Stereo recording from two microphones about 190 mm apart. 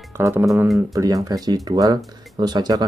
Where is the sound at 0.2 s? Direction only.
15° right (ahead or behind).